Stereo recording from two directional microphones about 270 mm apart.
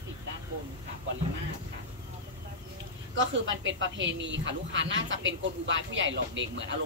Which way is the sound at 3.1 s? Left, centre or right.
Right.